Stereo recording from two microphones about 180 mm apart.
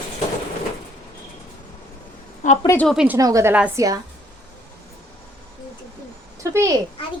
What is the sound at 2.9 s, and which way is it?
Speech, 10° right (ahead or behind).